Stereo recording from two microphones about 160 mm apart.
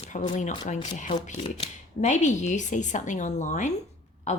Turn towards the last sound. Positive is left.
turn(degrees=50)  # may be behind; listen again after turning